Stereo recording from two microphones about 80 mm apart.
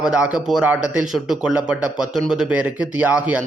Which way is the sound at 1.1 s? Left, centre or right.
Centre.